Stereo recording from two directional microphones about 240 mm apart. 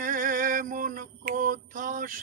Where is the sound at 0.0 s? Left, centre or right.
Right.